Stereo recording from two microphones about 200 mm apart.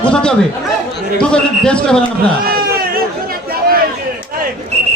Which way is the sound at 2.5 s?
50° right (ahead or behind).